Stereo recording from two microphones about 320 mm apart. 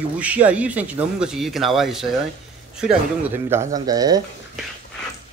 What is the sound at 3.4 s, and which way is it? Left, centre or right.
Speech, centre.